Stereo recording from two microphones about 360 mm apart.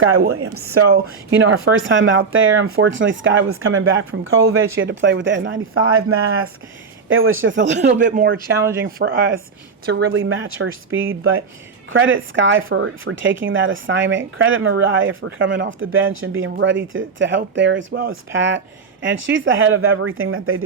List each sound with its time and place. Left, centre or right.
0.3 s speech: right